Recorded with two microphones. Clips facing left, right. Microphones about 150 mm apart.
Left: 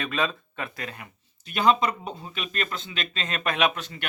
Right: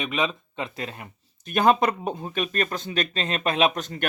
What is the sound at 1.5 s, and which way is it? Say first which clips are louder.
A man's voice: right 2 dB; 45° right (ahead or behind).